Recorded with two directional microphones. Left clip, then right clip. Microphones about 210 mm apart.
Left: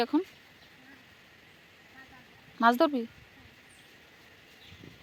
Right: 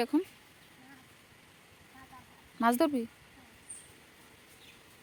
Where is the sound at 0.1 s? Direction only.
5° right (ahead or behind).